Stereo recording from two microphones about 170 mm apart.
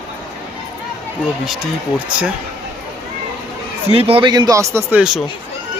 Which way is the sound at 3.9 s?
35° right (ahead or behind).